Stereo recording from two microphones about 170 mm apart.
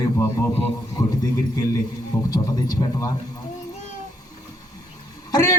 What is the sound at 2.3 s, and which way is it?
Speech, 20° left (ahead or behind).